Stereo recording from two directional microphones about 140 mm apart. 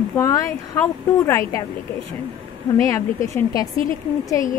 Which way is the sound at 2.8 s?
20° left (ahead or behind).